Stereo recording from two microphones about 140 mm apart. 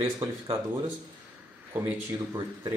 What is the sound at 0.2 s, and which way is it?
Speech, 35° right (ahead or behind).